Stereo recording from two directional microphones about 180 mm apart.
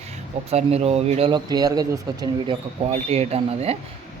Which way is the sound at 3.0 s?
35° right (ahead or behind).